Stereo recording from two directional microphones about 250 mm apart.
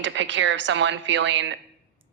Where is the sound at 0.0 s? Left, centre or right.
Right.